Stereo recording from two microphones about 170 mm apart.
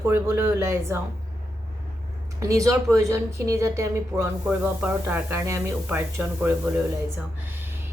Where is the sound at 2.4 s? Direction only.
20° right (ahead or behind).